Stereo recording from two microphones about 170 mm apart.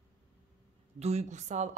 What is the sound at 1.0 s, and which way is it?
Speech, 40° right (ahead or behind).